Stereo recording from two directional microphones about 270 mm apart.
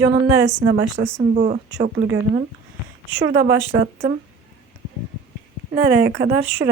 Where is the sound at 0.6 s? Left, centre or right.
Right.